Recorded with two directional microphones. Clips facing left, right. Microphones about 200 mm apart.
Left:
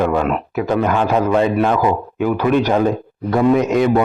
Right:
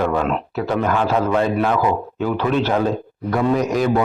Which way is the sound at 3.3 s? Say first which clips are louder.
Left 4 dB; 25° left (ahead or behind).